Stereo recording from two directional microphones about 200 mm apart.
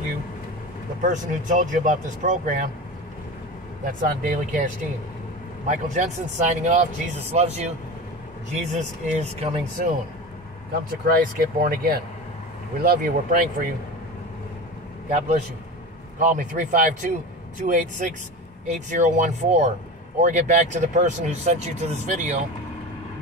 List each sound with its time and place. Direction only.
1.0 s speech: 40° right (ahead or behind)
3.8 s speech: 40° right (ahead or behind)
5.7 s speech: 40° right (ahead or behind)
8.7 s speech: 35° right (ahead or behind)
9.8 s speech: 45° right (ahead or behind)
15.0 s speech: 35° right (ahead or behind)